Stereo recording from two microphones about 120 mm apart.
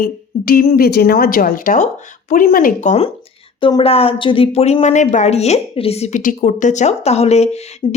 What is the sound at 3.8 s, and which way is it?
A woman's voice, 55° left (ahead or behind).